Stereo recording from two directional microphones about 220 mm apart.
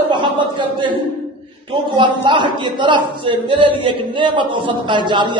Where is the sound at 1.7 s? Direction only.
20° right (ahead or behind).